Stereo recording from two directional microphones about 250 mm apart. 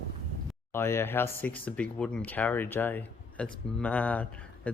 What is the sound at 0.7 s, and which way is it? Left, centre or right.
Speech, centre.